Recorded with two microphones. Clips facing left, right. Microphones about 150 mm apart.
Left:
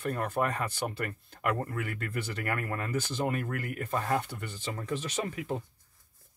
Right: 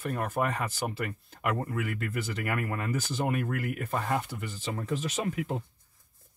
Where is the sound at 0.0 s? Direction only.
5° right (ahead or behind).